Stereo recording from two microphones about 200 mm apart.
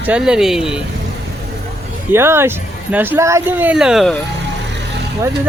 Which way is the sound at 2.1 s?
10° right (ahead or behind).